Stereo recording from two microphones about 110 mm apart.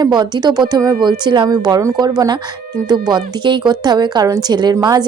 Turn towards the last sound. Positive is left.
turn(degrees=-40)  # may be behind; listen again after turning